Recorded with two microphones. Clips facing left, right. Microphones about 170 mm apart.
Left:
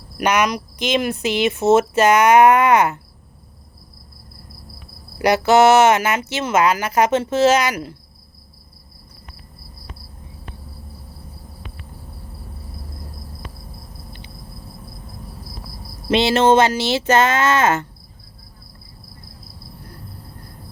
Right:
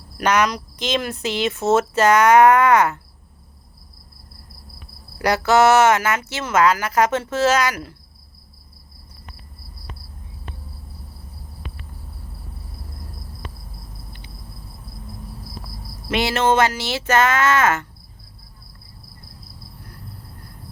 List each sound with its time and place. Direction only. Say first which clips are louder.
0.2 s speech: left 1 dB; 15° left (ahead or behind)
5.2 s speech: left 3 dB; 20° left (ahead or behind)
16.0 s speech: left 5 dB; 25° left (ahead or behind)